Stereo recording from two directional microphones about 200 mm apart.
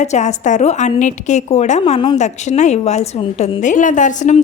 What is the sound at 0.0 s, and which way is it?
A woman's voice, 35° left (ahead or behind).